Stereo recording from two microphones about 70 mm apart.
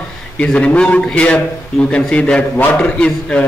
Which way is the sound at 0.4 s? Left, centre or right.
Centre.